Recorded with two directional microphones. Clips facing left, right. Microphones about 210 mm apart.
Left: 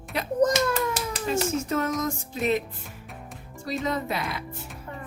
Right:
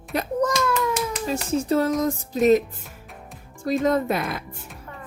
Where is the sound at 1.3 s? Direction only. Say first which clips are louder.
Right 3 dB; 35° right (ahead or behind).